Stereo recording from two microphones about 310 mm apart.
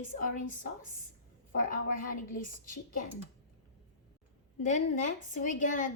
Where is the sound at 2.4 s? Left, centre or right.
Left.